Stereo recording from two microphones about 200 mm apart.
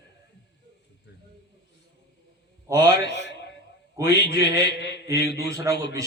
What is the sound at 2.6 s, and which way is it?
Speech, 15° right (ahead or behind).